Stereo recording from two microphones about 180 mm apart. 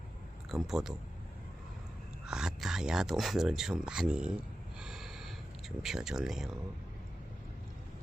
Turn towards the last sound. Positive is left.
turn(degrees=0)  # may be behind; listen again after turning